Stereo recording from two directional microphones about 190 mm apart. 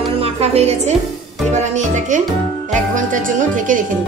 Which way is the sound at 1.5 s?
35° right (ahead or behind).